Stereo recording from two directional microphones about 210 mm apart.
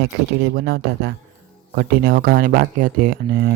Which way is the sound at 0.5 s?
45° right (ahead or behind).